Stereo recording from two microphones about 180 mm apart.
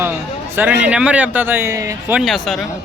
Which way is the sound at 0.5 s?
10° right (ahead or behind).